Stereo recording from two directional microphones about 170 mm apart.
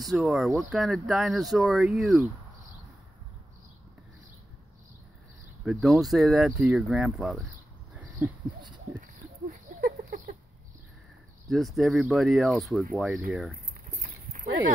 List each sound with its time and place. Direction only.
0.0 s speech: centre (ahead or behind)
5.7 s speech: centre (ahead or behind)
7.9 s a sound: 10° right (ahead or behind)
9.0 s a sound: 55° right (ahead or behind)
11.5 s speech: centre (ahead or behind)
14.0 s clip-clop: 50° right (ahead or behind)